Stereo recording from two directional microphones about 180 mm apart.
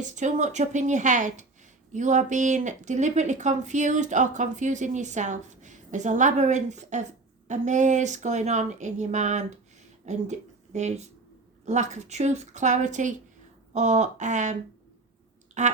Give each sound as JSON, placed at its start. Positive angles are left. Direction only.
{"t": 0.0, "sound": "a woman's voice", "side_deg": -40}
{"t": 15.6, "sound": "speech", "side_deg": -40}